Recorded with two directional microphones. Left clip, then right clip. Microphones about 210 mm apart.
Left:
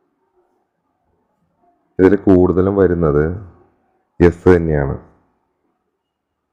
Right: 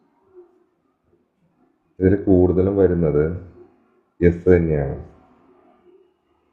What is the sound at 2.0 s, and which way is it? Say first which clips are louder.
Speech: left 4 dB; 55° left (ahead or behind).